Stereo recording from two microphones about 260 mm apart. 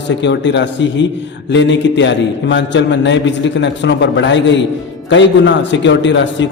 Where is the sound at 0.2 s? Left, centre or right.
Left.